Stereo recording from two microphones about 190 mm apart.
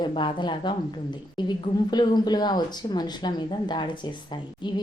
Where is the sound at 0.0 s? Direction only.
25° left (ahead or behind).